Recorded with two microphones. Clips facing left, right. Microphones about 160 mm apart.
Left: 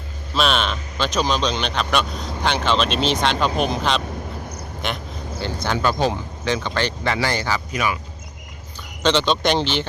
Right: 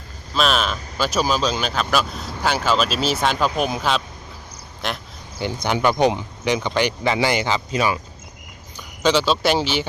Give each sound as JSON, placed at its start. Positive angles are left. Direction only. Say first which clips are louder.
{"t": 0.3, "sound": "speech", "louder": "even", "side_deg": 0}
{"t": 5.4, "sound": "speech", "louder": "right 2 dB", "side_deg": -15}
{"t": 9.0, "sound": "speech", "louder": "right 1 dB", "side_deg": -5}